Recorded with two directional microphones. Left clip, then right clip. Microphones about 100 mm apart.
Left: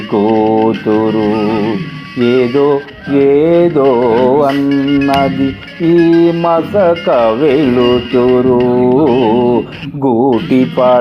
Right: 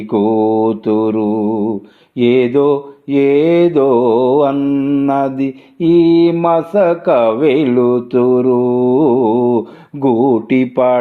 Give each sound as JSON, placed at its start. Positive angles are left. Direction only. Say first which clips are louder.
{"t": 0.1, "sound": "a sound", "louder": "left 2 dB", "side_deg": 40}
{"t": 2.1, "sound": "music", "louder": "left 1 dB", "side_deg": 45}
{"t": 5.0, "sound": "speech", "louder": "left 3 dB", "side_deg": 40}
{"t": 5.9, "sound": "music", "louder": "left 1 dB", "side_deg": 45}